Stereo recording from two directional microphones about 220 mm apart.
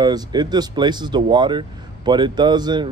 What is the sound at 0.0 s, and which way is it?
Speech, 20° right (ahead or behind).